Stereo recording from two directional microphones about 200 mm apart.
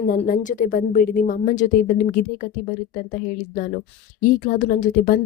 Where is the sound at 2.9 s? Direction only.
40° left (ahead or behind).